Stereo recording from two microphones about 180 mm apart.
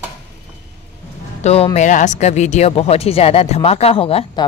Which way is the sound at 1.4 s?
35° left (ahead or behind).